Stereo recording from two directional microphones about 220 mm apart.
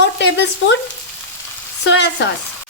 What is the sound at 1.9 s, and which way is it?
Frying, 50° left (ahead or behind).